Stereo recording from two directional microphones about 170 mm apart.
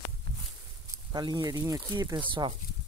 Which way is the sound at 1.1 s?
25° right (ahead or behind).